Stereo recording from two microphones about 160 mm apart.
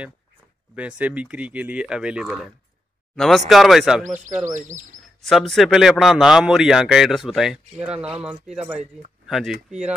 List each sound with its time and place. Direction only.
0.7 s a man's voice: 10° right (ahead or behind)
4.0 s speech: 50° right (ahead or behind)
5.2 s a man's voice: centre (ahead or behind)